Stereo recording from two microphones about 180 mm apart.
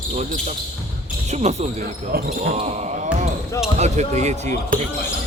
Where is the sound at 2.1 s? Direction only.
60° right (ahead or behind).